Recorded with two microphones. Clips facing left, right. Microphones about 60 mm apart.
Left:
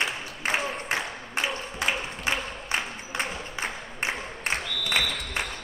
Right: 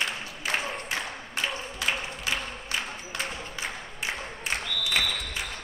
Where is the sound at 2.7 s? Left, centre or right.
Left.